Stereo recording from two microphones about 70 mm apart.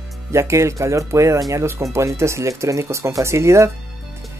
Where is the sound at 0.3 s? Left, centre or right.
Right.